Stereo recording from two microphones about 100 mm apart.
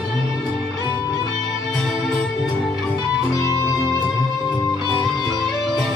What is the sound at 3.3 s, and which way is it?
Music, 35° left (ahead or behind).